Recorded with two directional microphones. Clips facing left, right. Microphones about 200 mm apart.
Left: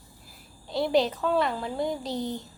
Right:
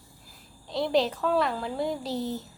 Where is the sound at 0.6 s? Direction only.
Centre (ahead or behind).